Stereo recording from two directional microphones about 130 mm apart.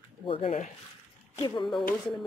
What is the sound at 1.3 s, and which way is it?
Speech, 35° left (ahead or behind).